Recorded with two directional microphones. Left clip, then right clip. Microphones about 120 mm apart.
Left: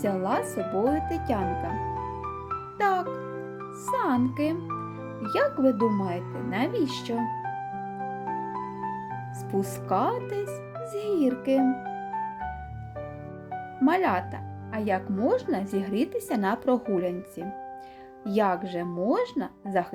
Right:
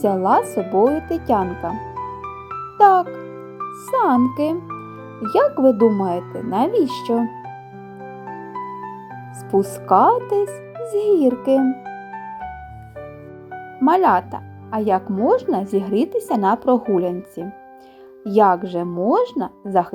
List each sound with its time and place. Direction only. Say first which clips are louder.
0.0 s speech: right 11 dB; 25° right (ahead or behind)
2.7 s a child's voice: right 13 dB; 20° right (ahead or behind)
9.5 s speech: right 12 dB; 25° right (ahead or behind)
13.8 s speech: right 9 dB; 25° right (ahead or behind)